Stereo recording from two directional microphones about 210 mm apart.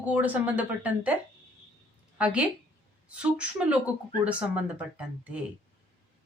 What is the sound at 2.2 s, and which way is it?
A woman's voice, 5° right (ahead or behind).